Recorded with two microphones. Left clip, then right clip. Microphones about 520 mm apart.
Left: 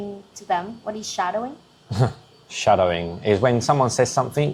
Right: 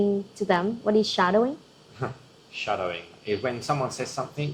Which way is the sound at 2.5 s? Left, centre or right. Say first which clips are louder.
Left 11 dB; left.